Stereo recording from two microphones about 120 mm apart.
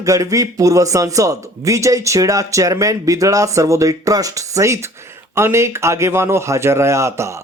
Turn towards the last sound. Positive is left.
turn(degrees=-25)  # may be behind; listen again after turning